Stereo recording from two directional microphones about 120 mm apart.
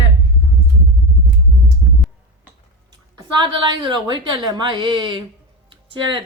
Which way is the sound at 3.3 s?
40° right (ahead or behind).